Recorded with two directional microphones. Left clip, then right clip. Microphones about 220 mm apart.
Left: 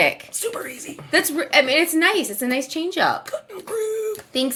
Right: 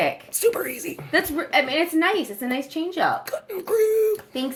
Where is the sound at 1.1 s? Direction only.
50° left (ahead or behind).